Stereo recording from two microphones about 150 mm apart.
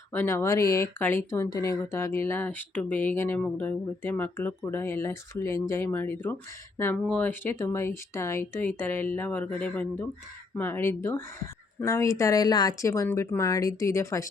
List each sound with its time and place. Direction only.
0.1 s speech: 15° left (ahead or behind)